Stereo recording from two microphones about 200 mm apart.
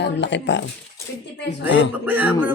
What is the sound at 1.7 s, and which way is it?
Speech, 60° left (ahead or behind).